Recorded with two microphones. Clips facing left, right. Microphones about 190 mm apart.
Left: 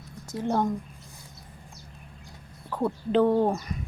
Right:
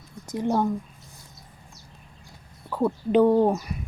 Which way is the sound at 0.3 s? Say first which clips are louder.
Right 3 dB; 15° right (ahead or behind).